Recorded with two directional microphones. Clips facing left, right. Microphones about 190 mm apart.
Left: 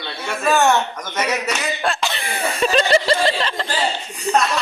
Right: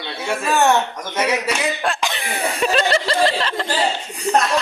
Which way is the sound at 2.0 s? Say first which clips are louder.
Even; 15° right (ahead or behind).